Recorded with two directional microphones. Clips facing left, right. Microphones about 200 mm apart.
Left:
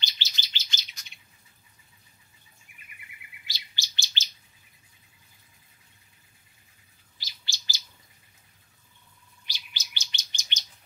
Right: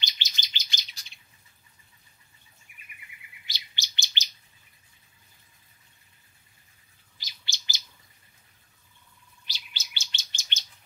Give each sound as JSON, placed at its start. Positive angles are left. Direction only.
{"t": 0.0, "sound": "bird", "side_deg": -15}
{"t": 3.4, "sound": "bird", "side_deg": -20}
{"t": 7.2, "sound": "bird", "side_deg": -20}
{"t": 9.5, "sound": "bird", "side_deg": 15}